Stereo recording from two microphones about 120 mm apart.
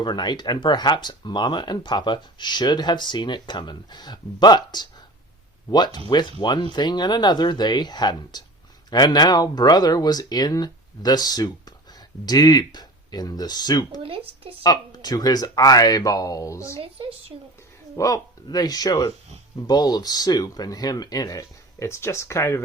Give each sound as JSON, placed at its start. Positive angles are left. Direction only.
{"t": 0.0, "sound": "speech", "side_deg": 35}
{"t": 16.8, "sound": "speech", "side_deg": -50}
{"t": 17.9, "sound": "speech", "side_deg": 25}